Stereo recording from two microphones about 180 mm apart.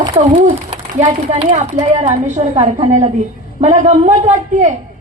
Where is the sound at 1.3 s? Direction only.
40° right (ahead or behind).